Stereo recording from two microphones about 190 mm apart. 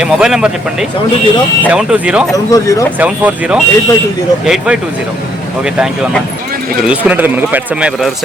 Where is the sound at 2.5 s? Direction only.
15° left (ahead or behind).